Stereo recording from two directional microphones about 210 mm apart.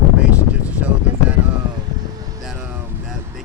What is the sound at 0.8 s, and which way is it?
Speech, 5° right (ahead or behind).